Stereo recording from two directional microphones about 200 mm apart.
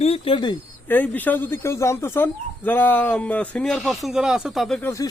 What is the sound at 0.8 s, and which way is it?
Speech, 10° left (ahead or behind).